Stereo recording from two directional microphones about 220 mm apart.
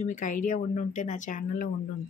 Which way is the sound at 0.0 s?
35° left (ahead or behind).